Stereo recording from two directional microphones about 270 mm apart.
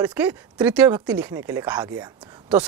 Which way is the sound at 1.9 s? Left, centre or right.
Centre.